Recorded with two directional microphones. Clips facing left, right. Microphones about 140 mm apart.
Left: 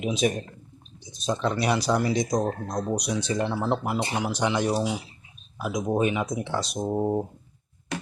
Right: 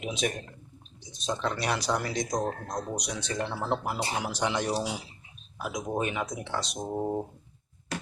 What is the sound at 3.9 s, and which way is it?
Speech, centre (ahead or behind).